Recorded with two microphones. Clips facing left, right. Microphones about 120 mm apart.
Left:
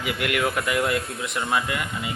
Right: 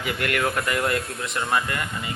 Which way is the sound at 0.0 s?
5° left (ahead or behind).